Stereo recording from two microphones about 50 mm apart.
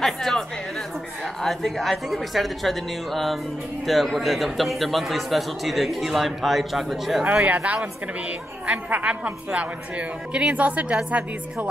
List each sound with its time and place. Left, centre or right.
0.0 s chatter: centre
1.2 s a man's voice: centre
7.4 s a woman's voice: right